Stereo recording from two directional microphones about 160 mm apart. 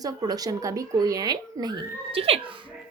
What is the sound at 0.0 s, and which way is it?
A woman's voice, 25° right (ahead or behind).